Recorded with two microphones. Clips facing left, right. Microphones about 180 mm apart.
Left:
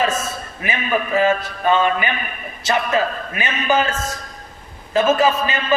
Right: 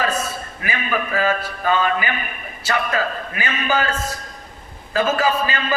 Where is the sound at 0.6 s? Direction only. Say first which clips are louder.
Left 3 dB; 20° left (ahead or behind).